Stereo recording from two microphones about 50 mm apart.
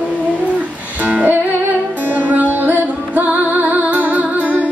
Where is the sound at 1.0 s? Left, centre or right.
Right.